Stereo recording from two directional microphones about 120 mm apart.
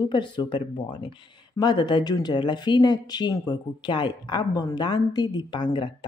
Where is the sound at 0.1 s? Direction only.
40° left (ahead or behind).